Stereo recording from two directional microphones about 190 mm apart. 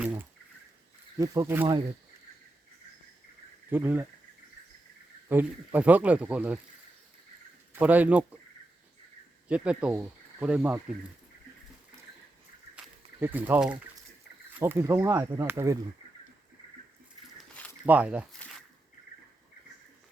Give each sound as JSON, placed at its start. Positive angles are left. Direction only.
{"t": 0.0, "sound": "a sound", "side_deg": -10}
{"t": 1.2, "sound": "speech", "side_deg": -15}
{"t": 3.7, "sound": "speech", "side_deg": -10}
{"t": 5.3, "sound": "speech", "side_deg": -10}
{"t": 7.7, "sound": "speech", "side_deg": -10}
{"t": 9.5, "sound": "speech", "side_deg": -5}
{"t": 12.7, "sound": "a sound", "side_deg": -5}
{"t": 14.6, "sound": "speech", "side_deg": -10}
{"t": 17.8, "sound": "speech", "side_deg": -5}